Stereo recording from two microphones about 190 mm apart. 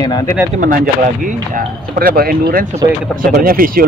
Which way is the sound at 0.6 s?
45° right (ahead or behind).